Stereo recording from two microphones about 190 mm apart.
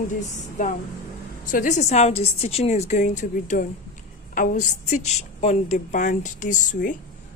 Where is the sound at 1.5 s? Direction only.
40° left (ahead or behind).